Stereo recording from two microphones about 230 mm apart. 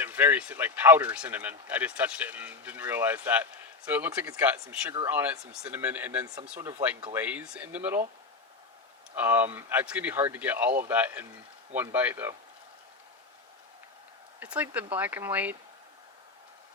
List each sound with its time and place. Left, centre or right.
0.0 s speech: centre
9.1 s speech: centre
14.3 s speech: centre